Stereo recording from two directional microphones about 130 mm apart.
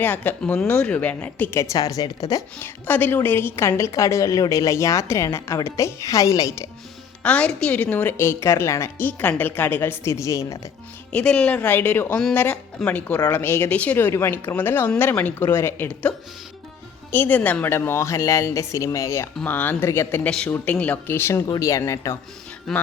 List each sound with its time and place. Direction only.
0.0 s a woman's voice: 15° left (ahead or behind)
2.6 s a woman's voice: 15° left (ahead or behind)
7.2 s a woman's voice: 10° left (ahead or behind)
11.1 s a woman's voice: 5° left (ahead or behind); by 22.2 s 25° left (ahead or behind)